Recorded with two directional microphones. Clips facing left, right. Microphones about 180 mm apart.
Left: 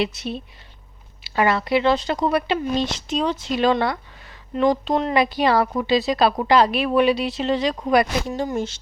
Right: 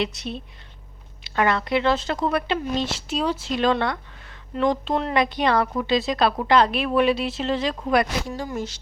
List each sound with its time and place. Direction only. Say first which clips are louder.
0.0 s speech: left 3 dB; centre (ahead or behind)
8.3 s speech: left 5 dB; 20° left (ahead or behind)